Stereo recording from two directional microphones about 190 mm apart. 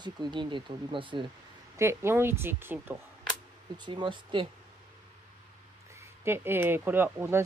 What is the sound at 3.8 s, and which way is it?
Speech, 25° right (ahead or behind).